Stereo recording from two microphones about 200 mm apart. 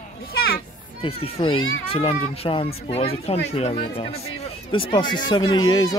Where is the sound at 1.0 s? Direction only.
25° left (ahead or behind).